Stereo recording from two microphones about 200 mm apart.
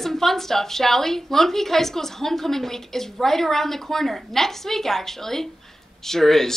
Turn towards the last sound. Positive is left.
turn(degrees=0)  # may be behind; listen again after turning